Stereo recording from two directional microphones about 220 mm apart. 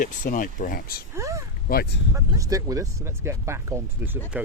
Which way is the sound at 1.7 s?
45° left (ahead or behind).